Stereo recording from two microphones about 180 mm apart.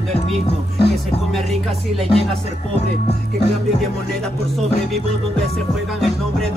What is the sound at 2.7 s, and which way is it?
Music, 35° left (ahead or behind).